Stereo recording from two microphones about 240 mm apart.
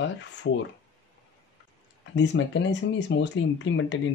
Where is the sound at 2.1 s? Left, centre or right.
Left.